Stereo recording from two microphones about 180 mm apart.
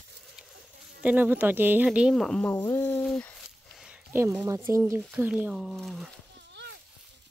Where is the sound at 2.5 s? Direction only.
15° left (ahead or behind).